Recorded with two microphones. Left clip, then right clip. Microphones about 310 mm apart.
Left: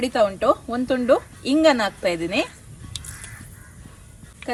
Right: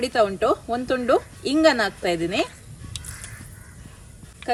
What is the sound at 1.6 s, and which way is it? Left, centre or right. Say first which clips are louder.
Speech: left 1 dB; centre.